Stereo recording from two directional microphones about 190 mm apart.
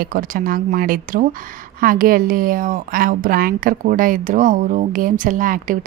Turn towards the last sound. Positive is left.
turn(degrees=-45)  # may be behind; listen again after turning